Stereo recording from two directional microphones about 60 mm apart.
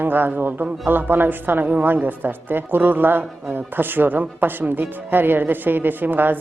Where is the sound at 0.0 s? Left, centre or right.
Right.